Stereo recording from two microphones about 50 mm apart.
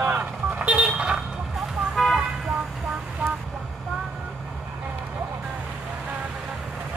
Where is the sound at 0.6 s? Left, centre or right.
Right.